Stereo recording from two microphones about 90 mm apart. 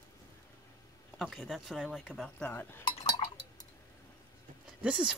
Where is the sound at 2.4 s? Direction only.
20° left (ahead or behind).